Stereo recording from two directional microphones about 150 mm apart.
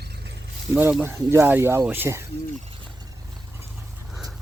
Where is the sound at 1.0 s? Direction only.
20° right (ahead or behind).